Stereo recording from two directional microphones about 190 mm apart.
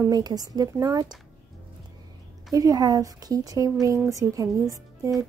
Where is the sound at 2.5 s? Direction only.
20° right (ahead or behind).